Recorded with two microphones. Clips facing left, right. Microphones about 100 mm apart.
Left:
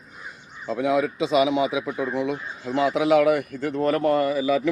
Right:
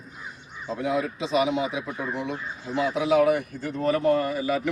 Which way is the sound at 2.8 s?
80° left.